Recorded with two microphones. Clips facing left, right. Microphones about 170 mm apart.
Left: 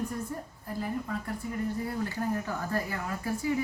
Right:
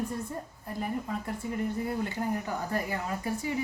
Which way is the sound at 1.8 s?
20° right (ahead or behind).